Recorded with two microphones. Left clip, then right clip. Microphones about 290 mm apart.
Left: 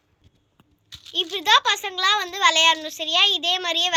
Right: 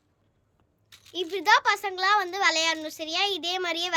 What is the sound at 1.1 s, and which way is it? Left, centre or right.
A child's voice, centre.